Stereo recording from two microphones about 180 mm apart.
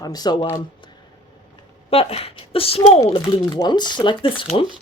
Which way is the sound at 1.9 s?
30° left (ahead or behind).